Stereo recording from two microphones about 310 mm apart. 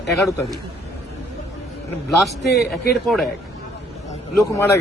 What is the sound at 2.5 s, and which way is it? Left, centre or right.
Speech, left.